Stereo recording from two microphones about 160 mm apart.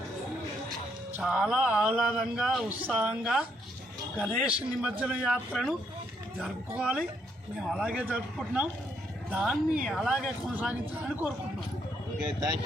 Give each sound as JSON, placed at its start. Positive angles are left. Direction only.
{"t": 1.2, "sound": "a woman's voice", "side_deg": -5}
{"t": 12.2, "sound": "speech", "side_deg": -25}